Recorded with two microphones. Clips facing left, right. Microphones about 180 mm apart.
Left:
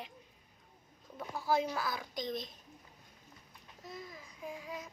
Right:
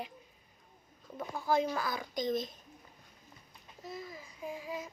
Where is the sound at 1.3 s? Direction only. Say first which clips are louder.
Right 2 dB; 5° left (ahead or behind).